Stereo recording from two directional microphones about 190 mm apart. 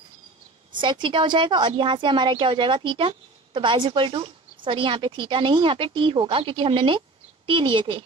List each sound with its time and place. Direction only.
0.7 s a woman's voice: 25° right (ahead or behind)